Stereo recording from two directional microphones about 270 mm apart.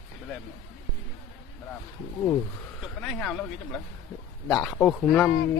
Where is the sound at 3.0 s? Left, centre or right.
Centre.